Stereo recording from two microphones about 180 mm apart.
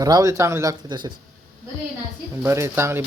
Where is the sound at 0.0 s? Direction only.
20° right (ahead or behind).